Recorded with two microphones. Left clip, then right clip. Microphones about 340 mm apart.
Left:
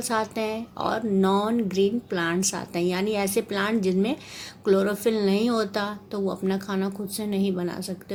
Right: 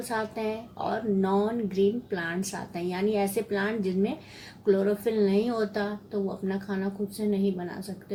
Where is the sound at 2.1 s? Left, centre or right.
Left.